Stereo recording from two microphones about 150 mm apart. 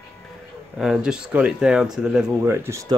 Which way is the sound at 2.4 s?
15° right (ahead or behind).